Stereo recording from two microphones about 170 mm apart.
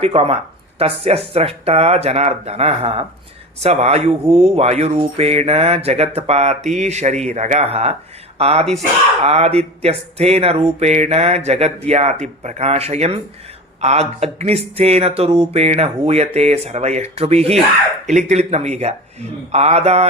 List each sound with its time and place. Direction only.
0.0 s speech: 35° right (ahead or behind)